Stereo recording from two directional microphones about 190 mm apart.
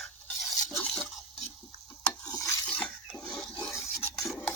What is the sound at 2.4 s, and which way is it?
Toilet flush, 5° left (ahead or behind).